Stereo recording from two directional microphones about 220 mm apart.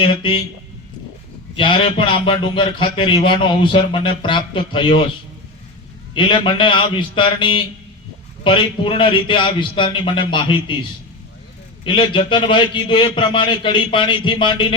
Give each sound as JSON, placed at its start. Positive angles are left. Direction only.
{"t": 0.0, "sound": "a man's voice", "side_deg": 25}
{"t": 1.5, "sound": "a man's voice", "side_deg": 20}
{"t": 6.1, "sound": "a man's voice", "side_deg": 20}
{"t": 11.9, "sound": "a man's voice", "side_deg": 20}